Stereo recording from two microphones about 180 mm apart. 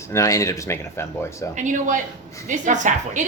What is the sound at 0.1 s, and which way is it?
Speech, 15° left (ahead or behind).